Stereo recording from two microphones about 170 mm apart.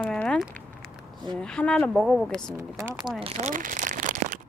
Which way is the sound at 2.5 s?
20° right (ahead or behind).